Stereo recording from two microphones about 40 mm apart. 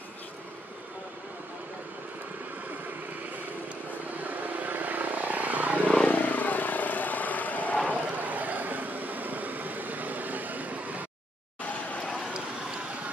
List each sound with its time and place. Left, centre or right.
4.2 s vehicle: right
6.0 s vehicle: left
7.9 s vehicle: right
11.9 s a sound: left